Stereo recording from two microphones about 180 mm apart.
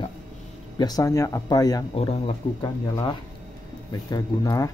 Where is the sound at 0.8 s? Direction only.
20° left (ahead or behind).